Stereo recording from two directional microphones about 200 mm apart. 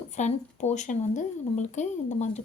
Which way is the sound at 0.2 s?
35° left (ahead or behind).